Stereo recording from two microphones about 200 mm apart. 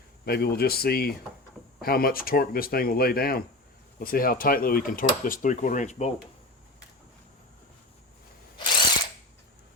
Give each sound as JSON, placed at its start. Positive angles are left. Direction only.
{"t": 0.3, "sound": "speech", "side_deg": 50}